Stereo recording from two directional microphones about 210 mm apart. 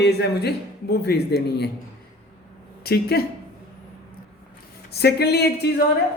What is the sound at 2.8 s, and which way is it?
Speech, 50° left (ahead or behind).